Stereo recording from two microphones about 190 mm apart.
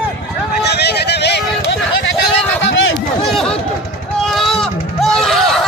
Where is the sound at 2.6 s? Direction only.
80° left.